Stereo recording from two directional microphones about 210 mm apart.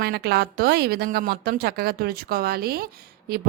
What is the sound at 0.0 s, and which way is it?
A woman's voice, 50° right (ahead or behind).